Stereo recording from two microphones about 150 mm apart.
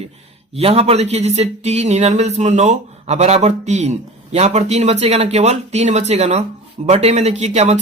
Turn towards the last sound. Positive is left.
turn(degrees=-50)  # may be behind; listen again after turning